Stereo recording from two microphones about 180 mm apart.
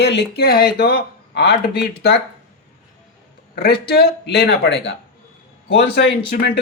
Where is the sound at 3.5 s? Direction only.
60° left (ahead or behind).